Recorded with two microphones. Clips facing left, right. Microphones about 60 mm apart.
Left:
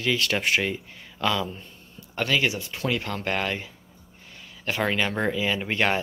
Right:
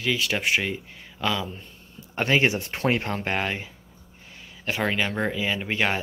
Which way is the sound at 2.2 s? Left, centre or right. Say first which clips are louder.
Right 3 dB; right.